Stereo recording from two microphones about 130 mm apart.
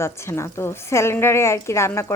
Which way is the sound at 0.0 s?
20° left (ahead or behind).